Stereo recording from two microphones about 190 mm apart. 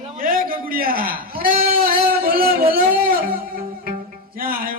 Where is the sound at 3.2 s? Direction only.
50° right (ahead or behind).